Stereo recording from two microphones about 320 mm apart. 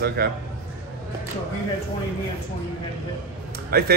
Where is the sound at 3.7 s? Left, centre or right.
Right.